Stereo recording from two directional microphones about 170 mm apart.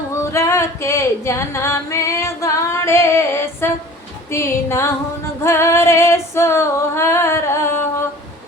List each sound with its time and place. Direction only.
0.2 s a sound: 15° left (ahead or behind)
4.3 s music: 15° left (ahead or behind)
5.4 s female singing: 15° left (ahead or behind)